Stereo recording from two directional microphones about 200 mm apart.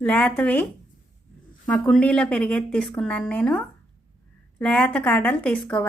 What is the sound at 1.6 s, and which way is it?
A woman's voice, 5° left (ahead or behind).